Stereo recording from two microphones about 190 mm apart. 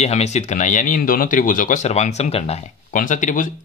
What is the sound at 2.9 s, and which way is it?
Speech, 45° left (ahead or behind).